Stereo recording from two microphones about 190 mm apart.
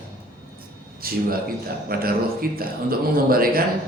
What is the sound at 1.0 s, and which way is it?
Speech, 50° right (ahead or behind).